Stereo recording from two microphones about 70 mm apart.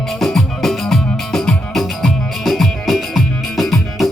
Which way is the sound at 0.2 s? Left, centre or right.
Centre.